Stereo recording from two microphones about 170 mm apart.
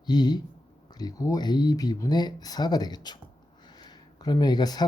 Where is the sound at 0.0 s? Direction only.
25° left (ahead or behind).